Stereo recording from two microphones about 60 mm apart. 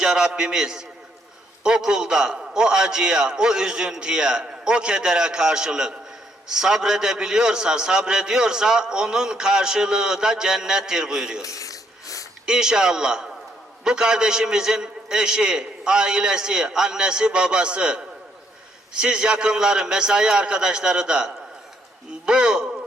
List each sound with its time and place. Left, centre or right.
0.0 s a man's voice: centre
11.4 s sneeze: left
12.5 s a man's voice: centre